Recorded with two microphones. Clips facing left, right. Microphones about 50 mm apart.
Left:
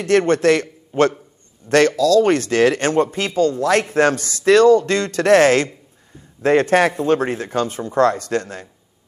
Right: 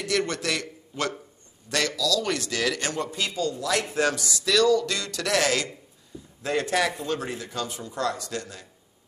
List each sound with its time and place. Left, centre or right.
0.0 s a man's voice: left